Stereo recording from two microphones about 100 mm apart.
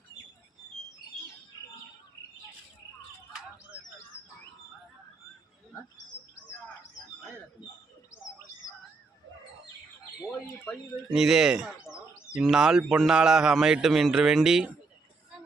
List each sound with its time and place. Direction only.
11.1 s speech: 5° right (ahead or behind)